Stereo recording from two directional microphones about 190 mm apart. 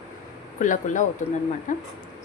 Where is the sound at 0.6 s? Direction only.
40° left (ahead or behind).